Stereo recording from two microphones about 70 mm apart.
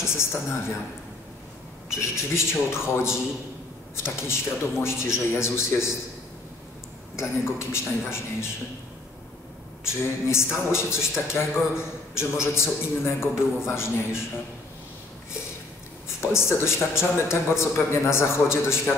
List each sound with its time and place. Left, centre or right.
0.0 s a man's voice: left
1.9 s a man's voice: left
4.3 s a man's voice: left
7.2 s a man's voice: left
9.8 s a man's voice: left
16.3 s a man's voice: left